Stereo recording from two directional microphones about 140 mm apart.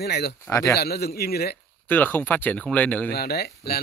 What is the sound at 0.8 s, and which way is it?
Speech, 90° left.